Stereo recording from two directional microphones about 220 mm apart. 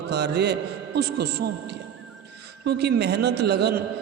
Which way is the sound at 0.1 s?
50° right (ahead or behind).